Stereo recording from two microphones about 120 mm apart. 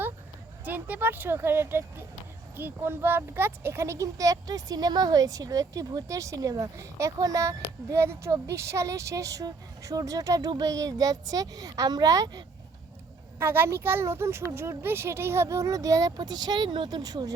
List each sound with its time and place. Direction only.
0.6 s speech: 15° right (ahead or behind); by 12.5 s 35° right (ahead or behind)
13.4 s speech: 20° right (ahead or behind)